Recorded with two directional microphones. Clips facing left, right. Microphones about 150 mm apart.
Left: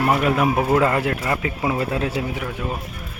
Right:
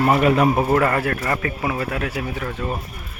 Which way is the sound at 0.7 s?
15° left (ahead or behind).